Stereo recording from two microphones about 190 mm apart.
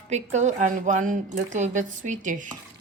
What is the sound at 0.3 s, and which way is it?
A woman's voice, 40° right (ahead or behind).